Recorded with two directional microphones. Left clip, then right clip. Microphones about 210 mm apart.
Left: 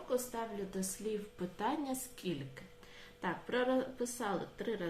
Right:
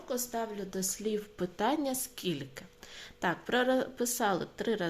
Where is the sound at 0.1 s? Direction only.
50° right (ahead or behind).